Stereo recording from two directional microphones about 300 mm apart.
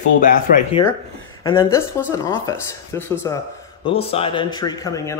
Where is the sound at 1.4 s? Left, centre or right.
Centre.